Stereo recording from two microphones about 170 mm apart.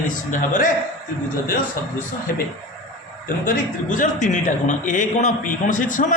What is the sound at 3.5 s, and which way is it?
A man's voice, 50° left (ahead or behind).